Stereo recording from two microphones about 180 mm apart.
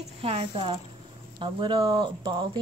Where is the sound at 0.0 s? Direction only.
30° right (ahead or behind).